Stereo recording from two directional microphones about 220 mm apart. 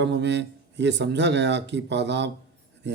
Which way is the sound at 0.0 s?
50° right (ahead or behind).